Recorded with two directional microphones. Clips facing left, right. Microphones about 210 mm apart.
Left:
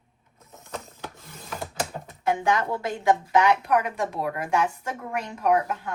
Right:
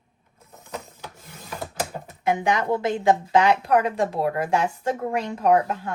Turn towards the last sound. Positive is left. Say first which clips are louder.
# right 3 dB
turn(degrees=-30)  # may be behind; listen again after turning